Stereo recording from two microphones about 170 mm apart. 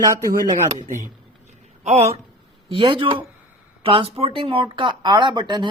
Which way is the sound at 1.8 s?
40° right (ahead or behind).